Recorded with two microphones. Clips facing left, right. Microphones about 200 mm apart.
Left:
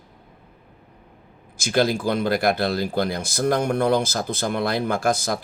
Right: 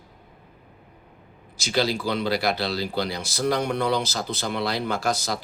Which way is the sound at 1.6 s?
50° left (ahead or behind).